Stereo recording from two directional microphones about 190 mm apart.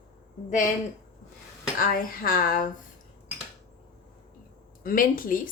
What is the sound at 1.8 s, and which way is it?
Speech, 50° left (ahead or behind).